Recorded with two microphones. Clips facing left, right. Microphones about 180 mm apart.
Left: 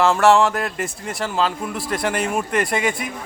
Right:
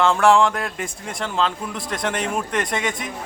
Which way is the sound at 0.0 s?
5° left (ahead or behind).